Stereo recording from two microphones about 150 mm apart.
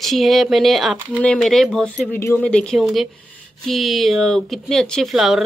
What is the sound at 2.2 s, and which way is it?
Speech, 15° left (ahead or behind).